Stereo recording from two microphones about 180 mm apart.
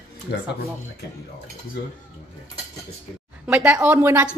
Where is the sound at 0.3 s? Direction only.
60° left (ahead or behind).